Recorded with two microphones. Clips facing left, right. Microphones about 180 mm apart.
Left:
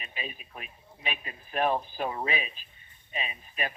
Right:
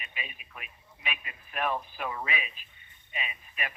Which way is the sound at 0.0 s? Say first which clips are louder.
Left 4 dB; 35° left (ahead or behind).